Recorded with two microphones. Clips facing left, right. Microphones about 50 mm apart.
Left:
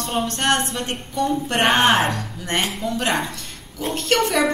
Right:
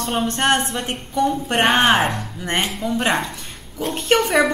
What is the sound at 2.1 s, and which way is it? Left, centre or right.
Speech, right.